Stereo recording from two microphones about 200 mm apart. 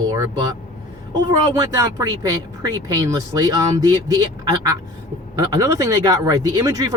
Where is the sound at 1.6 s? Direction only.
15° right (ahead or behind).